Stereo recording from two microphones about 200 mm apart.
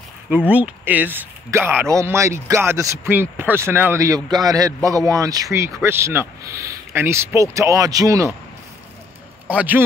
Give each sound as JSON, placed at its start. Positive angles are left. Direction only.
{"t": 0.5, "sound": "a man's voice", "side_deg": -10}
{"t": 9.5, "sound": "a man's voice", "side_deg": -10}